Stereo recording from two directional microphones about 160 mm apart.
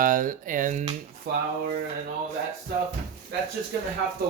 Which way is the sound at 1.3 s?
80° right.